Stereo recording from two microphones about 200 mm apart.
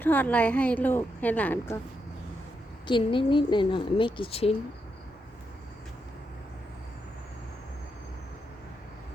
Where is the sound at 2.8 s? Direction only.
25° left (ahead or behind).